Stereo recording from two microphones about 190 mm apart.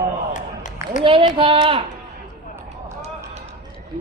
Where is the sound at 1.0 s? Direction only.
25° right (ahead or behind).